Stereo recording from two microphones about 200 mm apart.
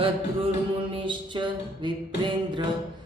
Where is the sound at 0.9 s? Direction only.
25° right (ahead or behind).